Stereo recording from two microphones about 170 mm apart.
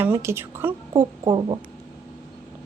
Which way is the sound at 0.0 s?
15° right (ahead or behind).